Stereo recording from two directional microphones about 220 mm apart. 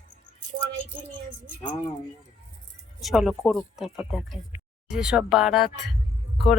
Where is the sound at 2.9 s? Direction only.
Centre (ahead or behind).